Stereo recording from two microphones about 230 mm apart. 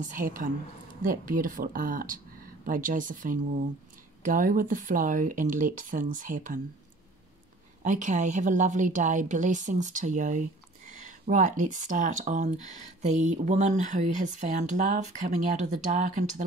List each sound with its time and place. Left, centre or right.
0.0 s speech: right
7.8 s speech: right